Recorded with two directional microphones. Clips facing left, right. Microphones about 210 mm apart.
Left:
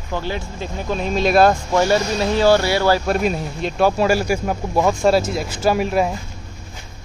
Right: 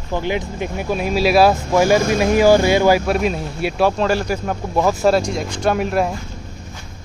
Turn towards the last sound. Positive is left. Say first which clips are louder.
# even
turn(degrees=0)  # may be behind; listen again after turning